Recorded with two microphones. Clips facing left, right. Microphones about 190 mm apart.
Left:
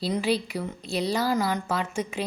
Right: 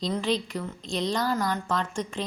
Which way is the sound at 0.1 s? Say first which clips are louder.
Left 3 dB; 10° left (ahead or behind).